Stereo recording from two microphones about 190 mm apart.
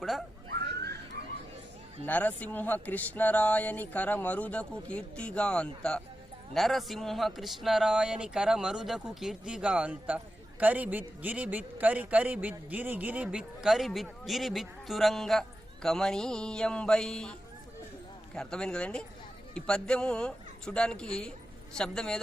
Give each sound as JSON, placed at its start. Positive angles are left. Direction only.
{"t": 0.0, "sound": "speech", "side_deg": 0}
{"t": 0.5, "sound": "a sound", "side_deg": -55}
{"t": 2.0, "sound": "a man's voice", "side_deg": 10}
{"t": 18.3, "sound": "a man's voice", "side_deg": 5}